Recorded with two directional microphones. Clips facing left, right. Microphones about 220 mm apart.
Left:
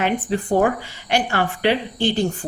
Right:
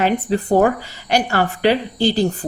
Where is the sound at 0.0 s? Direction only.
40° right (ahead or behind).